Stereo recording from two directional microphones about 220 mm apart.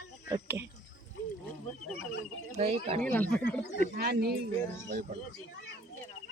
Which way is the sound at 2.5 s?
30° right (ahead or behind).